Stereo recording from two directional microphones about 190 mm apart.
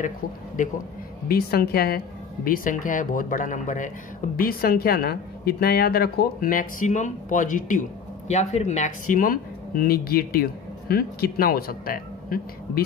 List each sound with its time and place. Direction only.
1.3 s speech: 55° left (ahead or behind)